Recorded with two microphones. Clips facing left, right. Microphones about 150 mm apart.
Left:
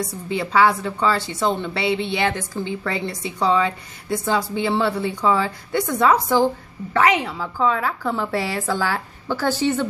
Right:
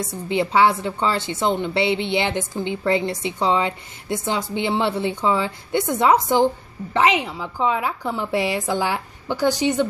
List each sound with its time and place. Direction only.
0.3 s a woman's voice: 25° right (ahead or behind)